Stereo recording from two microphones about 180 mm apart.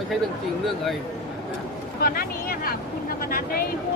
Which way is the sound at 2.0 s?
55° left (ahead or behind).